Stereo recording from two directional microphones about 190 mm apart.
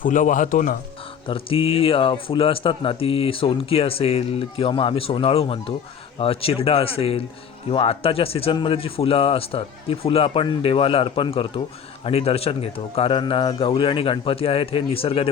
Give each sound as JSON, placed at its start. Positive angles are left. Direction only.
{"t": 0.0, "sound": "speech", "side_deg": 45}
{"t": 1.3, "sound": "speech", "side_deg": 30}